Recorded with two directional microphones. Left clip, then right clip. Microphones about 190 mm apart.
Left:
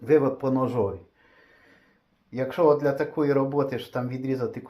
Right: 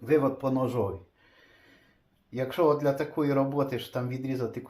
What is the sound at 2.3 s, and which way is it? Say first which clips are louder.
Speech: left 4 dB; 25° left (ahead or behind).